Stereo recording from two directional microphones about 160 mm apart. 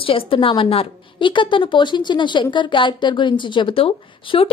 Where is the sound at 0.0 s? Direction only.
35° left (ahead or behind).